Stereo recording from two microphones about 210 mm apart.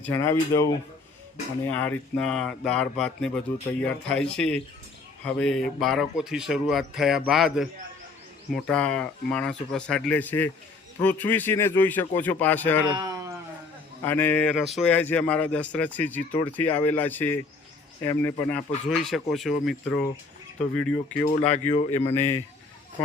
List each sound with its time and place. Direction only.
0.0 s speech: 10° left (ahead or behind)
12.9 s a sound: 15° right (ahead or behind)
14.0 s speech: 10° left (ahead or behind)
21.3 s a man's voice: 30° left (ahead or behind)
22.1 s speech: 10° left (ahead or behind)